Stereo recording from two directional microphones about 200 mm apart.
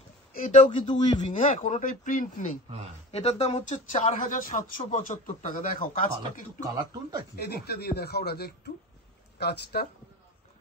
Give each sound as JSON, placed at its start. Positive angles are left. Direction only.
{"t": 0.3, "sound": "speech", "side_deg": 40}
{"t": 0.7, "sound": "speech", "side_deg": 25}
{"t": 1.2, "sound": "speech", "side_deg": 40}
{"t": 6.6, "sound": "speech", "side_deg": -20}
{"t": 7.3, "sound": "speech", "side_deg": 50}